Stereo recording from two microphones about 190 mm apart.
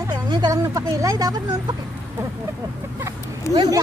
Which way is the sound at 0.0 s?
20° right (ahead or behind).